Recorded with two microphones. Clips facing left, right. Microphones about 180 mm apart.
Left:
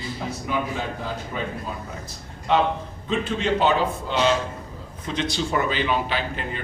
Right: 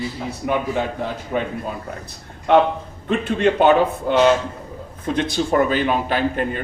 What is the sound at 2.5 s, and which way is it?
A man's voice, 60° right (ahead or behind).